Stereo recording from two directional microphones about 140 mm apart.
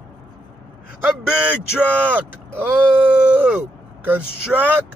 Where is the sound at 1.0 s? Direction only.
10° right (ahead or behind).